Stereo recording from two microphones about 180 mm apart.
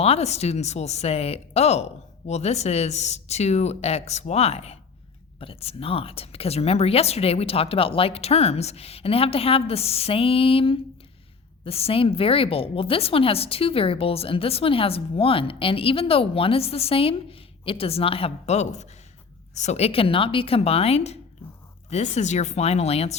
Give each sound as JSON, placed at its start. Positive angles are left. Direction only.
{"t": 0.0, "sound": "a woman's voice", "side_deg": 35}